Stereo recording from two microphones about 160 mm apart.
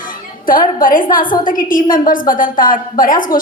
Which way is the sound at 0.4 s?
60° left (ahead or behind).